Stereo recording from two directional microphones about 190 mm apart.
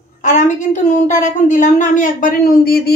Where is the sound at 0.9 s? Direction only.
40° left (ahead or behind).